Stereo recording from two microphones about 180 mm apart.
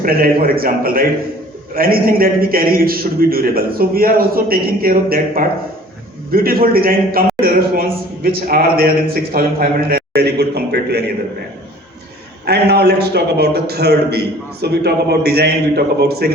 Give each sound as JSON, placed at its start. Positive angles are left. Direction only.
{"t": 0.0, "sound": "a man's voice", "side_deg": -55}
{"t": 12.5, "sound": "a man's voice", "side_deg": -65}